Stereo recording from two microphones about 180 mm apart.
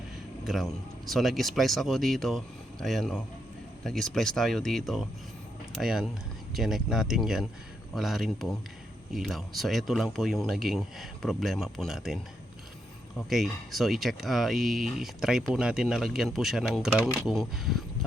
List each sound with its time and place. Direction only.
0.4 s speech: centre (ahead or behind)
13.3 s speech: centre (ahead or behind)